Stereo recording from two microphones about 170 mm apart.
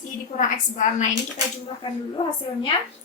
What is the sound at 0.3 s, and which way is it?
Speech, 45° left (ahead or behind).